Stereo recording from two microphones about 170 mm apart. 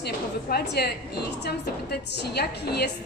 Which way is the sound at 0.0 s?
70° left (ahead or behind).